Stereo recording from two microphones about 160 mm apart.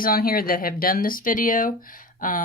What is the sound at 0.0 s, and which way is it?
Speech, 70° left (ahead or behind).